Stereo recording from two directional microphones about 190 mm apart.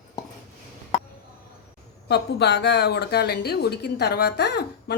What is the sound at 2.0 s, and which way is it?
A woman's voice, 60° left (ahead or behind).